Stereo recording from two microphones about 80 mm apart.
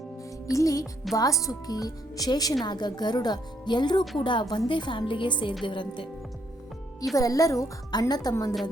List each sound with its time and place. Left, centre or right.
0.5 s a woman's voice: left
4.2 s a woman's voice: left
7.2 s a woman's voice: left
7.9 s a woman's voice: left